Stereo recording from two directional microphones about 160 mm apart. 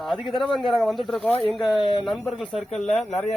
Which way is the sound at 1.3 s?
35° left (ahead or behind).